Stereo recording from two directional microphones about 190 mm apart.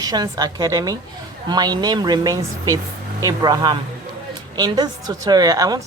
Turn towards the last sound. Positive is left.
turn(degrees=-20)  # may be behind; listen again after turning